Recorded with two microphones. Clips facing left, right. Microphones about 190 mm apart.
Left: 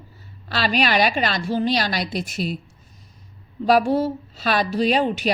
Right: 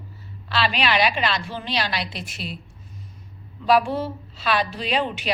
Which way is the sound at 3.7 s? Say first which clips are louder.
Left 3 dB; 40° left (ahead or behind).